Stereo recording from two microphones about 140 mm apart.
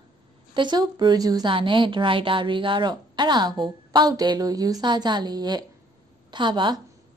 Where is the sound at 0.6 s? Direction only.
30° right (ahead or behind).